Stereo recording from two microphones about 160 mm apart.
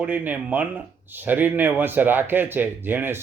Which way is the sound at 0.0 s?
10° right (ahead or behind).